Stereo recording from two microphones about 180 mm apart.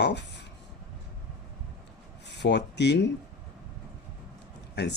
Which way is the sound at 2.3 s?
70° left (ahead or behind).